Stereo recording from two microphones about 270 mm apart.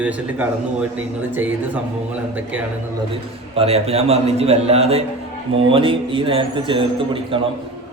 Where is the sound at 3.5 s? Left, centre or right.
Right.